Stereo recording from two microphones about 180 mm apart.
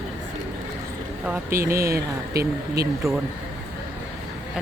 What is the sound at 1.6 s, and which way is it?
Speech, 15° right (ahead or behind).